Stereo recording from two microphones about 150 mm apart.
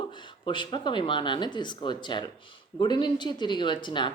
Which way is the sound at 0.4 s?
30° left (ahead or behind).